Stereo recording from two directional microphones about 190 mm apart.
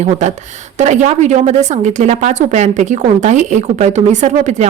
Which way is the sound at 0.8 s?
35° right (ahead or behind).